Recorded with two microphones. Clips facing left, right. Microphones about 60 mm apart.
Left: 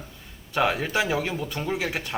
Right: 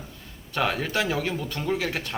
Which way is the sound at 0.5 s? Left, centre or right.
Centre.